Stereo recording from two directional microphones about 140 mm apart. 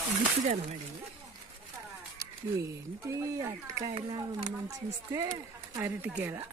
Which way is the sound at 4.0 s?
35° right (ahead or behind).